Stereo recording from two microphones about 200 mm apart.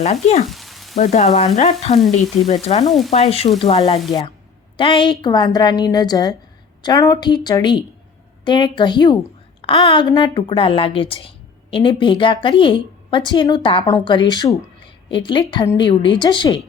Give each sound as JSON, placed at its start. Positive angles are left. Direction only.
{"t": 0.0, "sound": "frying", "side_deg": 35}
{"t": 0.4, "sound": "frying", "side_deg": 0}
{"t": 0.9, "sound": "frying", "side_deg": 35}
{"t": 3.1, "sound": "a woman's voice", "side_deg": 30}